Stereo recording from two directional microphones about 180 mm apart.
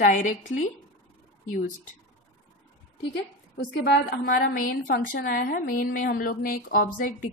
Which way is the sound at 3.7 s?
65° left (ahead or behind).